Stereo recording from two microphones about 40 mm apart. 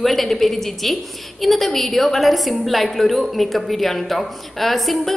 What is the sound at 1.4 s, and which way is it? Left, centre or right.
A woman's voice, centre.